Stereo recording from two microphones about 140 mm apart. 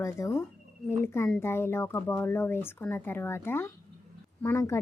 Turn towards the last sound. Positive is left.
turn(degrees=20)  # may be behind; listen again after turning